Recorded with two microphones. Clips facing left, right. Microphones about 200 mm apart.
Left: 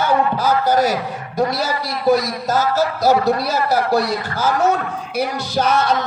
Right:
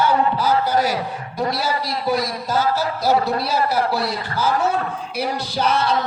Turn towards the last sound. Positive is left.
turn(degrees=45)  # may be behind; listen again after turning